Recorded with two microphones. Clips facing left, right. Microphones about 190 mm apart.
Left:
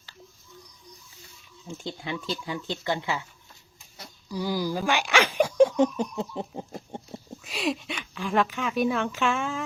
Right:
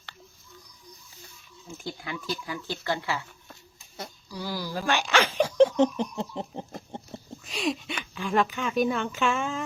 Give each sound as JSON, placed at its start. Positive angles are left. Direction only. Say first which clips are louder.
{"t": 1.8, "sound": "speech", "louder": "left 2 dB", "side_deg": 25}
{"t": 3.5, "sound": "a sound", "louder": "right 6 dB", "side_deg": -50}
{"t": 4.3, "sound": "speech", "louder": "left 6 dB", "side_deg": 20}